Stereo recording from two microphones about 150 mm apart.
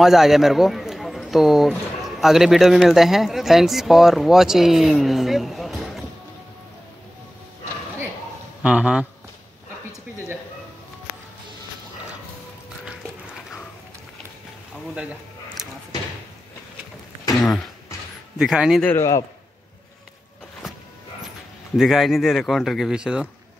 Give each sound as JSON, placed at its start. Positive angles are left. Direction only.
{"t": 0.0, "sound": "speech", "side_deg": 0}
{"t": 8.6, "sound": "speech", "side_deg": -5}
{"t": 12.8, "sound": "a sound", "side_deg": -5}
{"t": 18.4, "sound": "speech", "side_deg": -5}
{"t": 18.9, "sound": "a man's voice", "side_deg": 20}
{"t": 21.7, "sound": "speech", "side_deg": 0}